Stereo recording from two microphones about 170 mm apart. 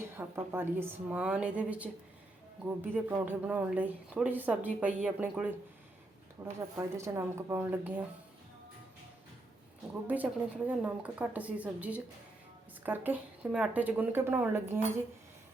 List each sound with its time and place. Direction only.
0.0 s speech: 15° right (ahead or behind)
10.1 s speech: 10° right (ahead or behind)